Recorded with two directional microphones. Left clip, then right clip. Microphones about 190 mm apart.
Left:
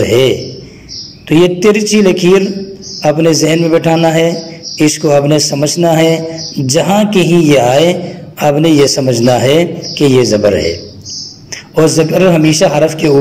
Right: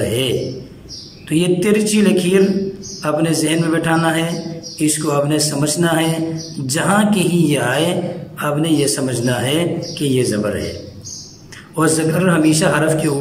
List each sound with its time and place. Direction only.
1.3 s a man's voice: 15° left (ahead or behind)
11.7 s a man's voice: 15° left (ahead or behind)